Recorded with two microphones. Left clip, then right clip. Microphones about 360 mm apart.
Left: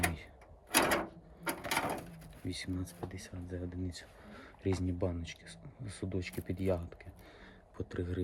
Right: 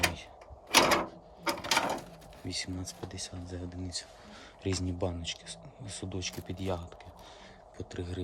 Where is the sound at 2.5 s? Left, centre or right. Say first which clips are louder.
Right 4 dB; centre.